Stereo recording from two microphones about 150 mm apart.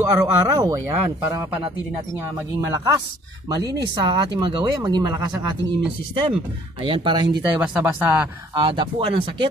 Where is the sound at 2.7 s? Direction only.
25° right (ahead or behind).